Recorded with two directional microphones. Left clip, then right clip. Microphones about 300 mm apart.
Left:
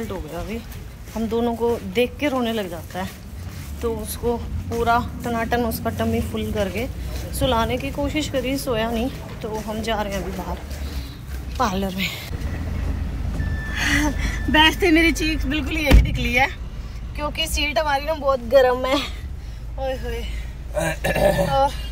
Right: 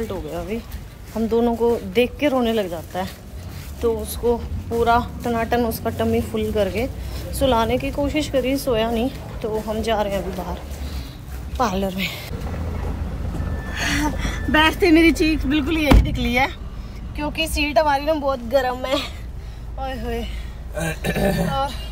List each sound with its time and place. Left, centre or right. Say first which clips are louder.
0.1 s speech: right 3 dB; centre
11.5 s speech: right 1 dB; centre
13.7 s a woman's voice: left 1 dB; centre
20.7 s speech: left 3 dB; left
21.5 s a woman's voice: left 4 dB; centre